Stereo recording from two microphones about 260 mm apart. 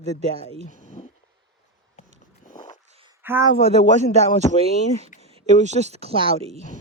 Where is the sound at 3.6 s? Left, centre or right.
Right.